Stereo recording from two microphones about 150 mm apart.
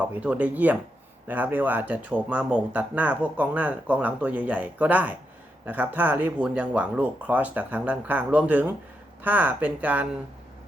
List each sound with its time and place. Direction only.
0.0 s speech: 10° right (ahead or behind)